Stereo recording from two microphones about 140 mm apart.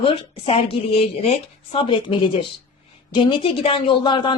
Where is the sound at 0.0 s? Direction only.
40° left (ahead or behind).